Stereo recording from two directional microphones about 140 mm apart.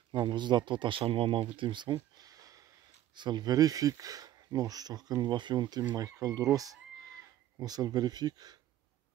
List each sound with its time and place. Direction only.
0.1 s speech: 30° right (ahead or behind)
2.1 s a sound: 25° right (ahead or behind)
3.2 s speech: 30° right (ahead or behind)